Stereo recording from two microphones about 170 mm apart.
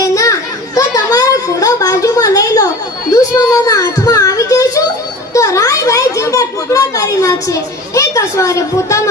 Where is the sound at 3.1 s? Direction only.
20° left (ahead or behind).